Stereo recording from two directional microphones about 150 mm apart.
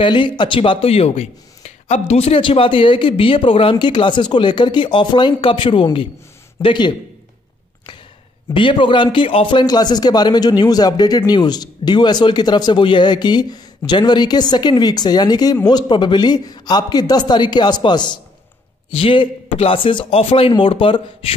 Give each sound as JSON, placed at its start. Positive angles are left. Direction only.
{"t": 0.0, "sound": "speech", "side_deg": 30}
{"t": 8.5, "sound": "speech", "side_deg": 35}